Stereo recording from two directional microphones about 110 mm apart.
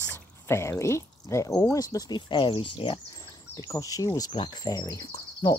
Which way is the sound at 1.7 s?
35° left (ahead or behind).